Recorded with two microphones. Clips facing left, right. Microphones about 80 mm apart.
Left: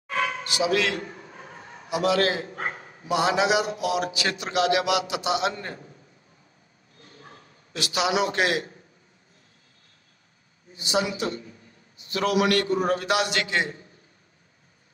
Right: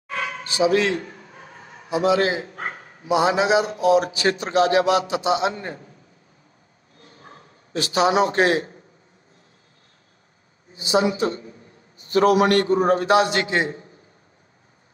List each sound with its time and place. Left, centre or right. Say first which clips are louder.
0.4 s a man's voice: right 8 dB; right
7.2 s a man's voice: right 2 dB; right
10.8 s a man's voice: right 6 dB; right